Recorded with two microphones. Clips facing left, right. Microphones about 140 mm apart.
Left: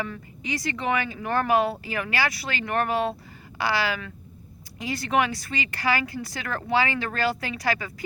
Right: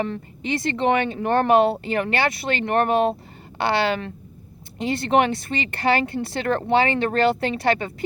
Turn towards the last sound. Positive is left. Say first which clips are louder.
# right 7 dB
turn(degrees=-30)  # may be behind; listen again after turning